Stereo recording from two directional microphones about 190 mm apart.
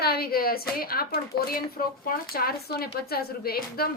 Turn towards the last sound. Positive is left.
turn(degrees=55)  # may be behind; listen again after turning